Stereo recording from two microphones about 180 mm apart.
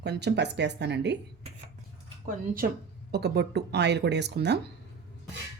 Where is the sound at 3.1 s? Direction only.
65° right (ahead or behind).